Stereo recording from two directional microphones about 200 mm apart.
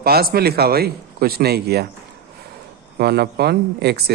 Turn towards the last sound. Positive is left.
turn(degrees=-55)  # may be behind; listen again after turning